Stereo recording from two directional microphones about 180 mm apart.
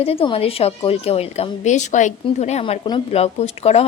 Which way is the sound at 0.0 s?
30° left (ahead or behind).